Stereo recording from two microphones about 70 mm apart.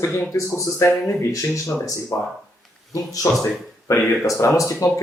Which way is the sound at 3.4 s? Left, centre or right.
Left.